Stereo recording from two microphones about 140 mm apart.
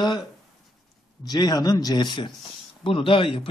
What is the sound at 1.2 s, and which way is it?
A man's voice, 30° left (ahead or behind).